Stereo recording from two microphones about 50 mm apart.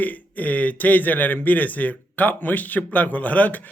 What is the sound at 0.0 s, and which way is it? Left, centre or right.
A man's voice, left.